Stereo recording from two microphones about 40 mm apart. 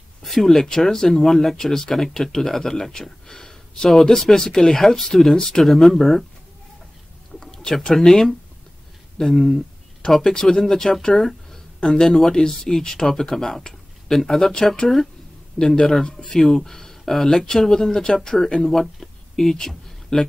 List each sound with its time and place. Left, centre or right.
0.2 s speech: centre
7.3 s speech: centre